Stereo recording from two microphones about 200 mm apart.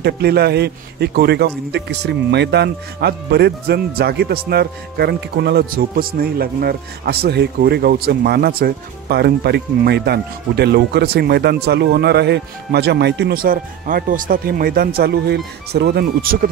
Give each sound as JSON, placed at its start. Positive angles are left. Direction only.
{"t": 0.0, "sound": "a man's voice", "side_deg": -55}